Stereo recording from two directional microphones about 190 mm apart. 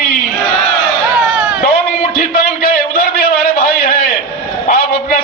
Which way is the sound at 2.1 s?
50° left (ahead or behind).